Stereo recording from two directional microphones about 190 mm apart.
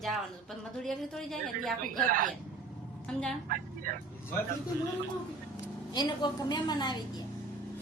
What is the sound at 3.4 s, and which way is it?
Speech, 45° right (ahead or behind).